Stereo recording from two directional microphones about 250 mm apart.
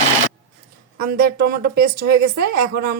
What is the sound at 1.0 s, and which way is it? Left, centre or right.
A woman's voice, right.